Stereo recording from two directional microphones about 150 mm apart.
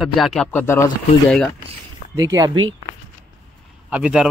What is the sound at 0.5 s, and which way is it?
Speech, 15° left (ahead or behind).